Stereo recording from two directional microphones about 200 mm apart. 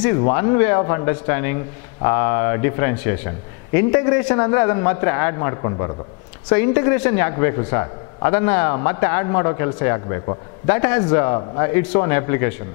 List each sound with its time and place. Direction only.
0.0 s a man's voice: 20° left (ahead or behind)